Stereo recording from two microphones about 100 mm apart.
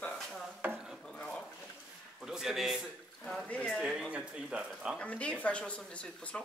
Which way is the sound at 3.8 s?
10° right (ahead or behind).